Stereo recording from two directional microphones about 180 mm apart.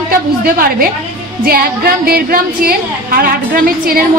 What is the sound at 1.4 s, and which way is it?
A woman's voice, 55° right (ahead or behind).